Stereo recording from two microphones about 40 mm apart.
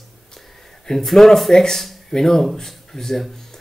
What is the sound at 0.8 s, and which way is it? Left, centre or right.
Speech, centre.